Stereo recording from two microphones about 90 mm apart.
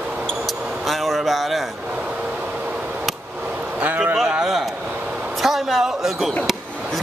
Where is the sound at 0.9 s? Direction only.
Centre (ahead or behind).